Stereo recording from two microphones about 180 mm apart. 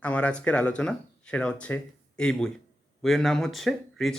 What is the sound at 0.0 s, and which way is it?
Speech, 10° left (ahead or behind).